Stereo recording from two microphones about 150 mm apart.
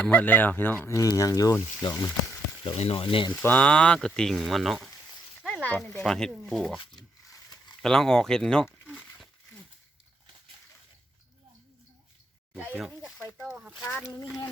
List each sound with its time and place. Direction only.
0.0 s speech: 10° left (ahead or behind)
0.9 s speech: 20° left (ahead or behind)
2.7 s speech: 40° left (ahead or behind)
3.4 s speech: 10° left (ahead or behind)
5.6 s speech: 15° left (ahead or behind)
7.3 s a sound: 25° left (ahead or behind)
7.8 s speech: 5° left (ahead or behind)
12.5 s speech: 5° right (ahead or behind)